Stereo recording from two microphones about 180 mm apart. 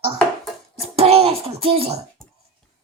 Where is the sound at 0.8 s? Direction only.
35° right (ahead or behind).